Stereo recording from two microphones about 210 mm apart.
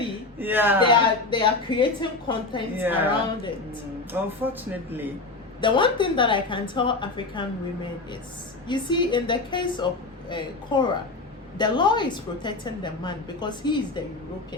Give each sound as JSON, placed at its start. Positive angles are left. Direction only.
{"t": 0.3, "sound": "speech", "side_deg": -10}
{"t": 0.9, "sound": "a woman's voice", "side_deg": 25}
{"t": 2.7, "sound": "speech", "side_deg": -10}
{"t": 4.1, "sound": "speech", "side_deg": -10}
{"t": 5.5, "sound": "a woman's voice", "side_deg": 25}
{"t": 8.6, "sound": "a woman's voice", "side_deg": 20}